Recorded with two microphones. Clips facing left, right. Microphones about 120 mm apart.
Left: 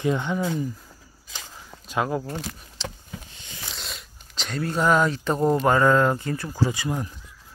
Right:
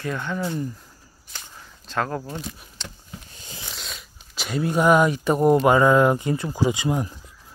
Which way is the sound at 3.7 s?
Centre (ahead or behind).